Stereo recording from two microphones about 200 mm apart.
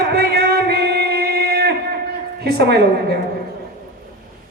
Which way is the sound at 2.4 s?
55° right (ahead or behind).